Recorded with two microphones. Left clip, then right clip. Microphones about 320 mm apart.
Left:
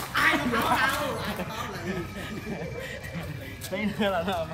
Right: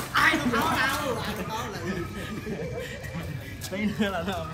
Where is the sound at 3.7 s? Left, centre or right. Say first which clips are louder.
Left 2 dB; left.